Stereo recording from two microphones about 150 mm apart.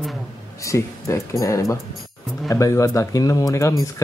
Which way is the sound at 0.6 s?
20° left (ahead or behind).